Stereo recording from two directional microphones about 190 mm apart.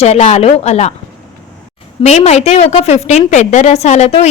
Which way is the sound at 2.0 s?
35° left (ahead or behind).